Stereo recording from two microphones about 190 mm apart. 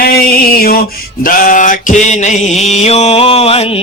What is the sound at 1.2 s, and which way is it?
Mantra, 45° left (ahead or behind).